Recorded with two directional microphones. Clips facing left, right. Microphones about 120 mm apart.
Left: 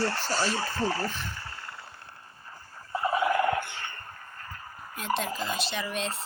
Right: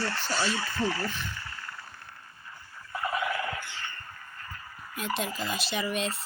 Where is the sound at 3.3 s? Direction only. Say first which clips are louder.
Left 8 dB; 55° left (ahead or behind).